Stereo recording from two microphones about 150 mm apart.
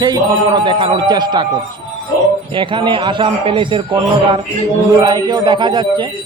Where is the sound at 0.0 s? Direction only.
30° right (ahead or behind).